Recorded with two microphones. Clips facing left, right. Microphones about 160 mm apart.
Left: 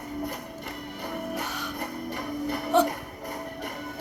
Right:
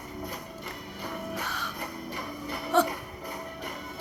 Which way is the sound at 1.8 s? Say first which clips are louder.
Left 4 dB; 55° left (ahead or behind).